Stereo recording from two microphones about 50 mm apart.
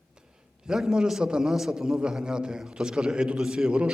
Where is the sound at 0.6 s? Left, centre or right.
Centre.